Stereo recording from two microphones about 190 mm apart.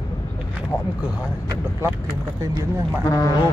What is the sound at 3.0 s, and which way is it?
Speech, 20° left (ahead or behind).